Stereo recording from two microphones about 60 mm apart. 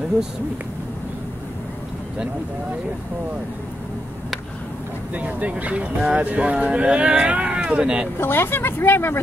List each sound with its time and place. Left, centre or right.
5.1 s speech: right
8.2 s speech: left